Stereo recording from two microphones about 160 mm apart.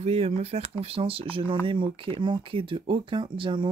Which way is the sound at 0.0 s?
40° right (ahead or behind).